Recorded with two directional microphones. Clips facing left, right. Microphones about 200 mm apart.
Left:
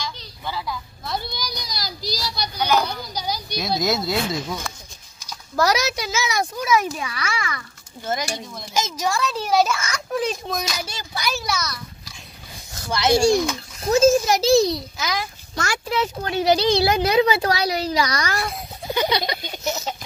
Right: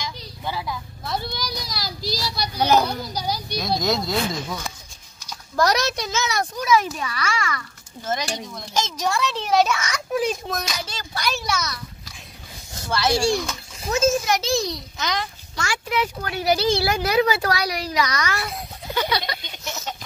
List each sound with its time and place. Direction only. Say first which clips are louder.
0.0 s a sound: right 1 dB; 20° right (ahead or behind)
2.0 s child singing: right 1 dB; centre (ahead or behind)
2.4 s children playing: right 2 dB; 30° right (ahead or behind)
3.5 s a child's voice: left 1 dB; 5° left (ahead or behind)
5.6 s a child's voice: even; 5° left (ahead or behind)
10.8 s a child's voice: even; 10° left (ahead or behind)
12.9 s speech: left 3 dB; 20° left (ahead or behind)
13.8 s a child's voice: left 5 dB; 30° left (ahead or behind)
15.0 s a child's voice: even; 5° left (ahead or behind)
15.5 s a child's voice: left 2 dB; 40° left (ahead or behind)
16.0 s speech: left 4 dB; 25° left (ahead or behind)
18.9 s speech: left 2 dB; 20° left (ahead or behind)
19.4 s a child's voice: left 7 dB; 40° left (ahead or behind)